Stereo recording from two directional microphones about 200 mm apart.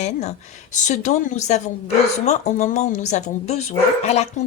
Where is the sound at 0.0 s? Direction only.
35° left (ahead or behind).